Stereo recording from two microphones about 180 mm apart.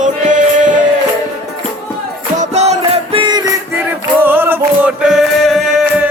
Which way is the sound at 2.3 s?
40° right (ahead or behind).